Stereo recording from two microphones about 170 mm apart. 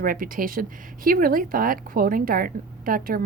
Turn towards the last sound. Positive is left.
turn(degrees=-55)  # may be behind; listen again after turning